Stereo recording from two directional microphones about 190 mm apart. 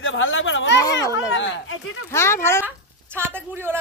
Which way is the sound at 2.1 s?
15° left (ahead or behind).